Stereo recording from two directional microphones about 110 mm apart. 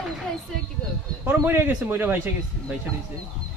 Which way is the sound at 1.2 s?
20° right (ahead or behind).